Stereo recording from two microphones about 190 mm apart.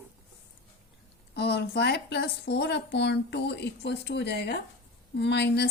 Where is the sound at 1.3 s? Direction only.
60° left (ahead or behind).